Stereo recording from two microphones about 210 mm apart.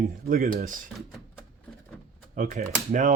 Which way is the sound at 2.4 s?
40° right (ahead or behind).